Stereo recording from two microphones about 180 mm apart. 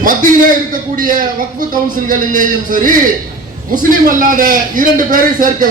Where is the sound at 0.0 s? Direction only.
50° right (ahead or behind).